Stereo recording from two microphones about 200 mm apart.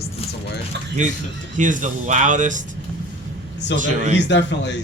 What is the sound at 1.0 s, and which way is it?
Speech, 35° right (ahead or behind).